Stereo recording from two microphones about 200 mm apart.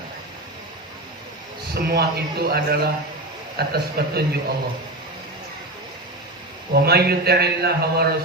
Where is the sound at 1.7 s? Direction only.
50° right (ahead or behind).